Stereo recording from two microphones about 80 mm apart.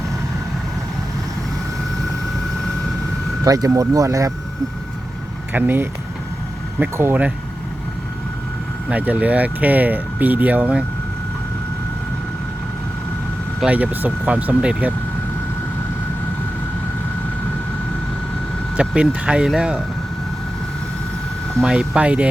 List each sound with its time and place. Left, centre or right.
3.4 s speech: right
5.5 s speech: right
6.9 s speech: right
8.9 s speech: centre
13.7 s speech: centre
18.8 s speech: centre
21.6 s speech: centre